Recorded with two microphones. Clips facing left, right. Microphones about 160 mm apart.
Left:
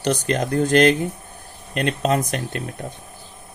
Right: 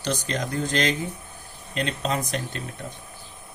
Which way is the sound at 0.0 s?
60° left (ahead or behind).